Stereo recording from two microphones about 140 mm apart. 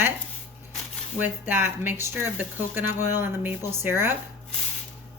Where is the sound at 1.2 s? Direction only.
15° right (ahead or behind).